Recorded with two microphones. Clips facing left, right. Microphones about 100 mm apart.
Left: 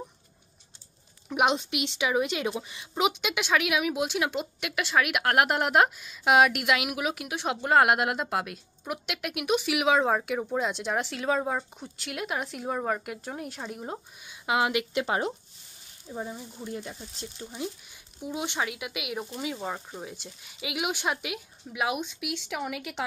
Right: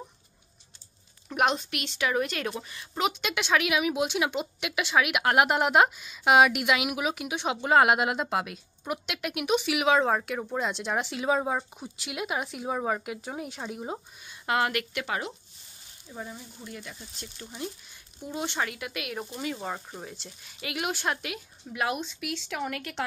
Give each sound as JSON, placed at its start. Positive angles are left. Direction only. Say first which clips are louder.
{"t": 1.3, "sound": "a woman's voice", "louder": "left 1 dB", "side_deg": 15}
{"t": 15.0, "sound": "speech", "louder": "left 5 dB", "side_deg": 30}
{"t": 16.1, "sound": "speech", "louder": "left 4 dB", "side_deg": 20}
{"t": 17.4, "sound": "speech", "louder": "left 2 dB", "side_deg": 15}